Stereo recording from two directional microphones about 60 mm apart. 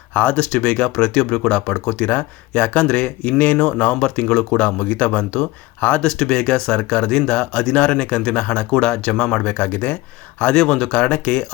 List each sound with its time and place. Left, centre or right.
0.1 s speech: left
6.0 s speech: centre